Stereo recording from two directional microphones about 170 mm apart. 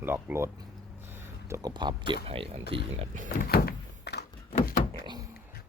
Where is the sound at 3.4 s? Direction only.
60° left (ahead or behind).